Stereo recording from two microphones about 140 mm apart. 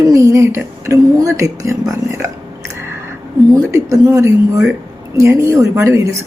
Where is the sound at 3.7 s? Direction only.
20° right (ahead or behind).